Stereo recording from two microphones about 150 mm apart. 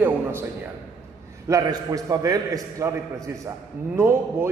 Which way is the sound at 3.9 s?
15° right (ahead or behind).